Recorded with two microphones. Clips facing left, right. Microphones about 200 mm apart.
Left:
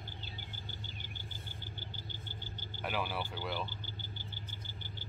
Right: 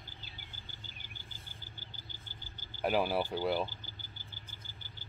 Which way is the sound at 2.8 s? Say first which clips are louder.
Right 7 dB; 40° right (ahead or behind).